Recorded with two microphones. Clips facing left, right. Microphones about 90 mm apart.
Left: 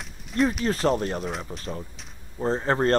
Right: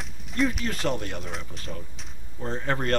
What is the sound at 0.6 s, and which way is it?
Speech, 35° left (ahead or behind).